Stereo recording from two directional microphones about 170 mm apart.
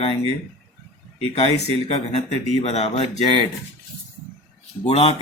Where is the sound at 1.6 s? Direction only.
40° left (ahead or behind).